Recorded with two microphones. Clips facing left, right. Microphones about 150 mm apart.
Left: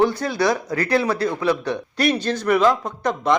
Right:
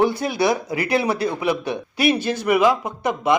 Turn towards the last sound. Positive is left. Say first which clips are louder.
# even
turn(degrees=-10)  # may be behind; listen again after turning